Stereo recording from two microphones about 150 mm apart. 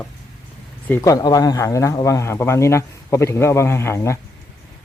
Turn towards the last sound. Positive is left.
turn(degrees=15)  # may be behind; listen again after turning